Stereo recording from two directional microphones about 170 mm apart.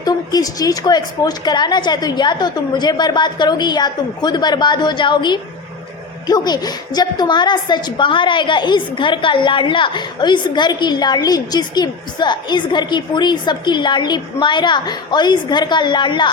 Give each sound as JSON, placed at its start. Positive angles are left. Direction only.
{"t": 0.0, "sound": "a woman's voice", "side_deg": 20}